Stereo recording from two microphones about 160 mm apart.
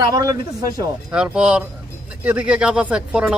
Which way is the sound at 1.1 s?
5° right (ahead or behind).